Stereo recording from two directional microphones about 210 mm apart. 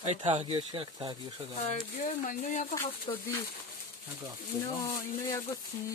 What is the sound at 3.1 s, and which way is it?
Speech, 20° left (ahead or behind).